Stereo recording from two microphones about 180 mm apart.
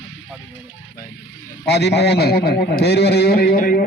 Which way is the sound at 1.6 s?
65° left (ahead or behind).